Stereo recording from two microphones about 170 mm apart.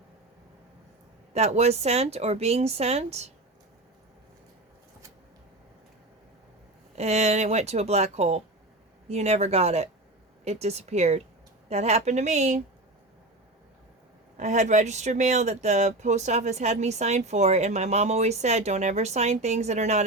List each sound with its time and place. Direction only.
1.3 s speech: 40° right (ahead or behind)
6.9 s speech: 40° right (ahead or behind)
14.3 s speech: 45° right (ahead or behind)